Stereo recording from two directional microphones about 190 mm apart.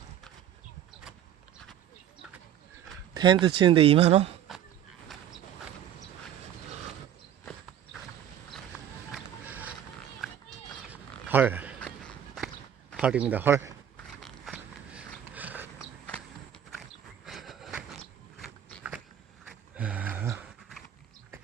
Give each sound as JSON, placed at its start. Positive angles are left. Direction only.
{"t": 3.2, "sound": "speech", "side_deg": -25}
{"t": 9.1, "sound": "boat", "side_deg": -10}
{"t": 10.2, "sound": "a sound", "side_deg": 0}
{"t": 11.9, "sound": "walk", "side_deg": 0}
{"t": 13.0, "sound": "speech", "side_deg": -5}
{"t": 13.9, "sound": "biting", "side_deg": 0}
{"t": 17.2, "sound": "a sound", "side_deg": 0}